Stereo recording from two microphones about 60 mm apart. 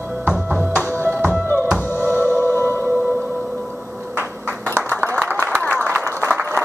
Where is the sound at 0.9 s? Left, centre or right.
Right.